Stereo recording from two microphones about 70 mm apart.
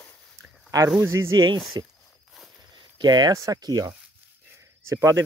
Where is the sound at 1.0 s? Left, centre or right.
Right.